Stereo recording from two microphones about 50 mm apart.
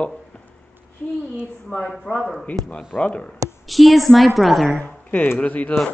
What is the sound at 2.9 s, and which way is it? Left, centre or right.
Speech, left.